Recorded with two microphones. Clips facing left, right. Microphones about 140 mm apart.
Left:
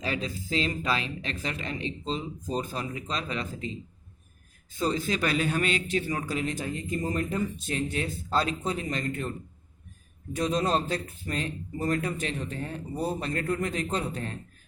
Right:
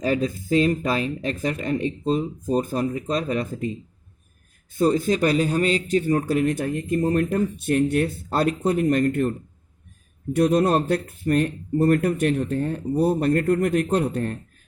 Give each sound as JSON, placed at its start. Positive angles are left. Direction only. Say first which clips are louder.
{"t": 0.0, "sound": "a man's voice", "louder": "right 9 dB", "side_deg": -45}
{"t": 10.3, "sound": "a man's voice", "louder": "right 8 dB", "side_deg": -60}